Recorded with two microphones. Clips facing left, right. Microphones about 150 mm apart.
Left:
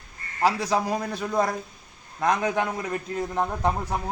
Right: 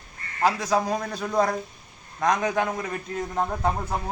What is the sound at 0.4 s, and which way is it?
A man's voice, 10° left (ahead or behind).